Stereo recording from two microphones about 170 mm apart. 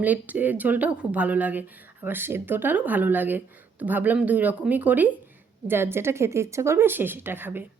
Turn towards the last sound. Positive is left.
turn(degrees=-10)  # may be behind; listen again after turning